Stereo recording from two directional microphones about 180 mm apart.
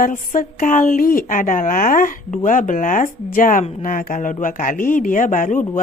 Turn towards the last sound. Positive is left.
turn(degrees=45)  # may be behind; listen again after turning